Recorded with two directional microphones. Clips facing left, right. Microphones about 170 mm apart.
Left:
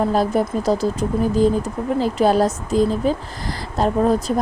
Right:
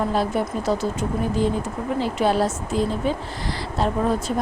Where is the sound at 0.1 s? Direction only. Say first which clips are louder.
Left 4 dB; 40° left (ahead or behind).